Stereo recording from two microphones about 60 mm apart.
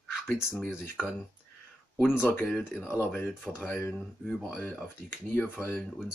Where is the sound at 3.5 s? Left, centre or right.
Centre.